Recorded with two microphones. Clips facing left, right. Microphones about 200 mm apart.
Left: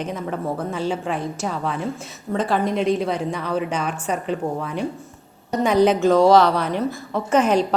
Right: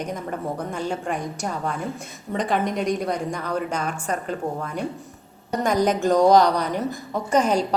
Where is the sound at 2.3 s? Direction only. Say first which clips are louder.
Left 2 dB; 15° right (ahead or behind).